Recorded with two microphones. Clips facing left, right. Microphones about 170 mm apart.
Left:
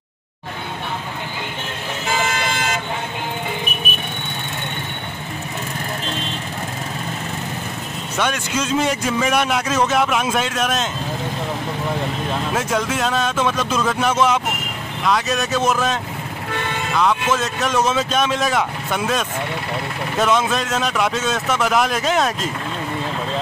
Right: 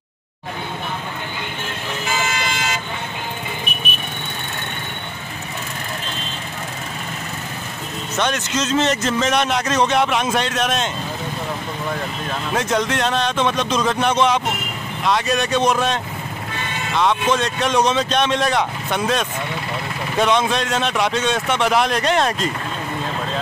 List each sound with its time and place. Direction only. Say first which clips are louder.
2.2 s vehicle: left 2 dB; 55° left (ahead or behind)
8.2 s a man's voice: even; 10° left (ahead or behind)
12.5 s speech: right 3 dB; 5° left (ahead or behind)